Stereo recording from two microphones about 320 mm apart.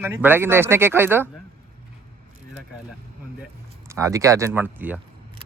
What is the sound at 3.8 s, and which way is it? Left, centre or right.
Speech, centre.